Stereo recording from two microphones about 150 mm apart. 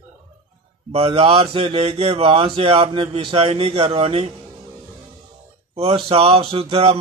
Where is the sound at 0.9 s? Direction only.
40° right (ahead or behind).